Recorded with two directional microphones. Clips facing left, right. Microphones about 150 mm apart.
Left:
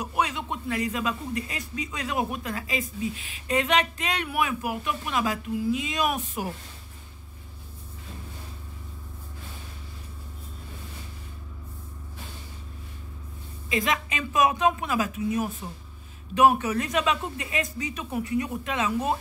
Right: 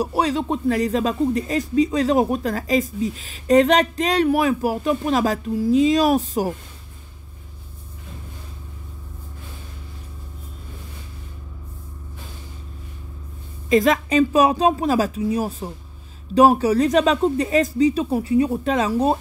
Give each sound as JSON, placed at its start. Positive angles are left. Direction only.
{"t": 0.0, "sound": "speech", "side_deg": -35}
{"t": 13.7, "sound": "speech", "side_deg": -40}